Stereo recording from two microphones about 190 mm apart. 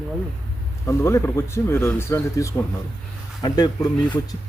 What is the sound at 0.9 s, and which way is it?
Speech, 15° left (ahead or behind).